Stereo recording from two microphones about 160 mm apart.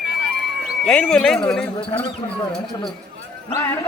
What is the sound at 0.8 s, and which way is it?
Speech, 5° left (ahead or behind).